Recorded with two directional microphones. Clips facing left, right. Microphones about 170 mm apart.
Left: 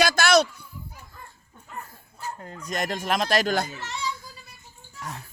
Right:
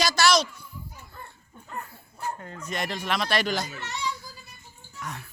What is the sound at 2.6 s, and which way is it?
A man's voice, 45° left (ahead or behind).